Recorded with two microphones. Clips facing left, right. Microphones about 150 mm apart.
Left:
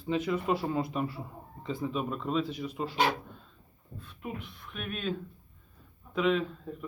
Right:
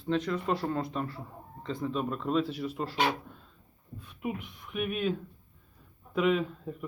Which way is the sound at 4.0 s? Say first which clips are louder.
Right 4 dB; 15° right (ahead or behind).